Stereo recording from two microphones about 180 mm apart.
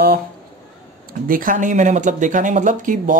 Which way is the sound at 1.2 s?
50° right (ahead or behind).